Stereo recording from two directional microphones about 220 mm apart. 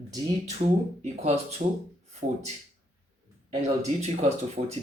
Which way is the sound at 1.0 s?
30° right (ahead or behind).